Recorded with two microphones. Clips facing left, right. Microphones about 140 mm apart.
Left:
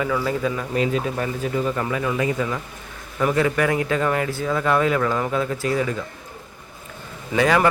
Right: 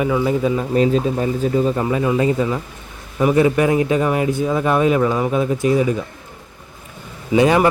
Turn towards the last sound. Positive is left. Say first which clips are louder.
# right 4 dB
turn(degrees=-20)  # may be behind; listen again after turning